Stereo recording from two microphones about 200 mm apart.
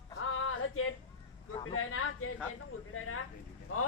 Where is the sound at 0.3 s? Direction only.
90° left.